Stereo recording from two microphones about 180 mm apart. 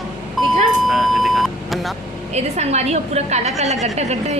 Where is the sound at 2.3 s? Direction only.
40° right (ahead or behind).